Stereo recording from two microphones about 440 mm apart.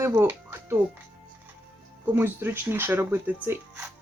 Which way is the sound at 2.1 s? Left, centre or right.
Centre.